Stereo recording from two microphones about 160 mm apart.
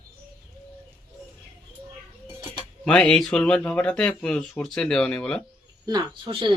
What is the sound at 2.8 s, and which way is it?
Speech, 5° left (ahead or behind).